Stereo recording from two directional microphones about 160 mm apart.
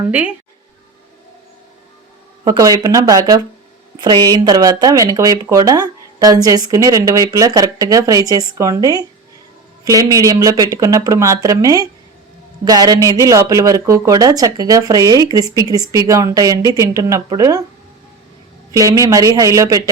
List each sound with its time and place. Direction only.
0.0 s speech: 10° right (ahead or behind)
2.4 s speech: 25° right (ahead or behind)
18.7 s speech: 20° right (ahead or behind)